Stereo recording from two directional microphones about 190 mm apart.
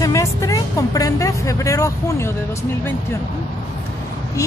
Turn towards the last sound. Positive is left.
turn(degrees=15)  # may be behind; listen again after turning